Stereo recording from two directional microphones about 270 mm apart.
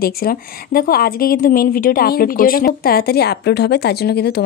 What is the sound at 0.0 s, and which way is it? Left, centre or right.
A woman's voice, left.